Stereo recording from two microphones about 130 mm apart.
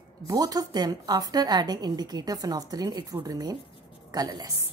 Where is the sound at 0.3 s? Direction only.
30° right (ahead or behind).